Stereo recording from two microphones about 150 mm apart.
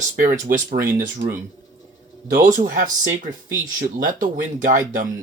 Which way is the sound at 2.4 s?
60° right (ahead or behind).